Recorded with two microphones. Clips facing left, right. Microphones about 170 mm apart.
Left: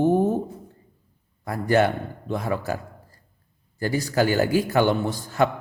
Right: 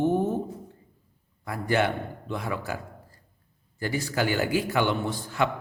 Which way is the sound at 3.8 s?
40° left (ahead or behind).